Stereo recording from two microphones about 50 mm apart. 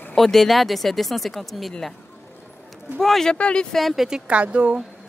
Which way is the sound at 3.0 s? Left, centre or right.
Centre.